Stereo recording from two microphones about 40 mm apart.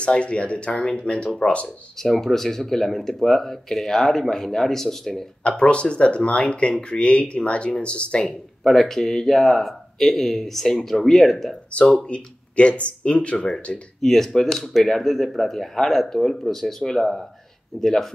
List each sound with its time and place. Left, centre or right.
0.0 s speech: left
2.0 s speech: centre
5.6 s speech: left
8.6 s speech: centre
12.1 s speech: left
13.7 s speech: centre